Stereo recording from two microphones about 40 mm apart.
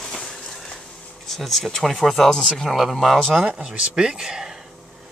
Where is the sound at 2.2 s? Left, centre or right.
Centre.